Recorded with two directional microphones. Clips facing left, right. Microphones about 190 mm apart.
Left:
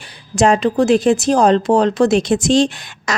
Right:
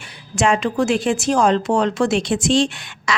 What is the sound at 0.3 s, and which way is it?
Speech, 40° left (ahead or behind).